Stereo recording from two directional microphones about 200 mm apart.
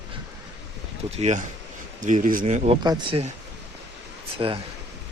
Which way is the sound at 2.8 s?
20° right (ahead or behind).